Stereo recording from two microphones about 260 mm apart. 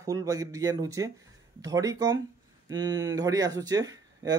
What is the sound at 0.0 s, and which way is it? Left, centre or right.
Speech, centre.